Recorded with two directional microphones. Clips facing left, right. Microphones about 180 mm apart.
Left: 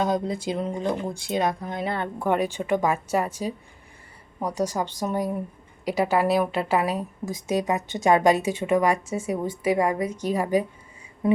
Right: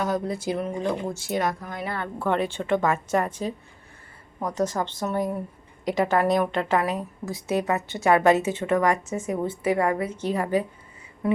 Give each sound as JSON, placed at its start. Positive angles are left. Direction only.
{"t": 0.0, "sound": "a woman's voice", "side_deg": 20}